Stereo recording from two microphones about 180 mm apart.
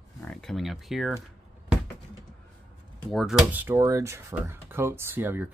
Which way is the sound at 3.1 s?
Centre (ahead or behind).